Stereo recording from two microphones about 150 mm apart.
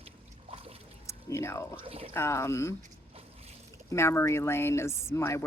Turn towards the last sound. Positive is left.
turn(degrees=20)  # may be behind; listen again after turning